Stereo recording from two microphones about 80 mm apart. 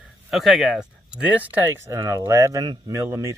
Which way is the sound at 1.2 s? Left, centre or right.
Right.